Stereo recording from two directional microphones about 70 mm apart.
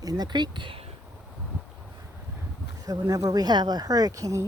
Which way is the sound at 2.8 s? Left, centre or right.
Right.